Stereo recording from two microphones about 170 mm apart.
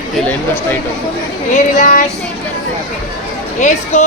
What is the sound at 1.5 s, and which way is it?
Speech, 50° left (ahead or behind).